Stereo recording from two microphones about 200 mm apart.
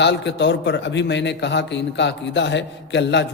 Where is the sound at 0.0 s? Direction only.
60° left (ahead or behind).